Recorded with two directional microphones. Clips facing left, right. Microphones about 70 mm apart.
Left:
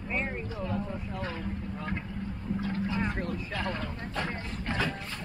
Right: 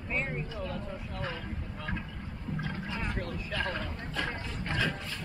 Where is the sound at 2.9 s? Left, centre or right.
Left.